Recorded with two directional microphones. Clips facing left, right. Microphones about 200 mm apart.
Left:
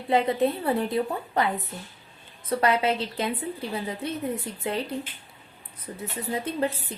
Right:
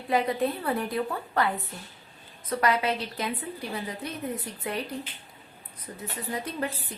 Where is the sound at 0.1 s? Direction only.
25° left (ahead or behind).